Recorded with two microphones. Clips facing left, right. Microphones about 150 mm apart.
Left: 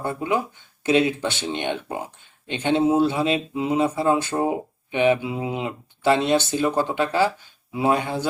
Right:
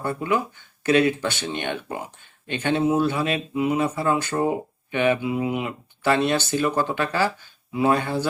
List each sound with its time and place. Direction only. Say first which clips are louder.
0.0 s speech: even; 20° left (ahead or behind)